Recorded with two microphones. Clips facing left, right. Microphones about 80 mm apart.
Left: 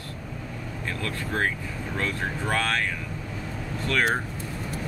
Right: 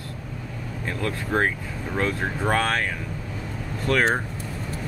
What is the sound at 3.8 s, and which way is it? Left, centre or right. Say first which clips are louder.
Speech: right 4 dB; right.